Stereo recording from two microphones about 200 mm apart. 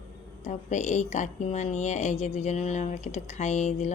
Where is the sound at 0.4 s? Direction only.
35° left (ahead or behind).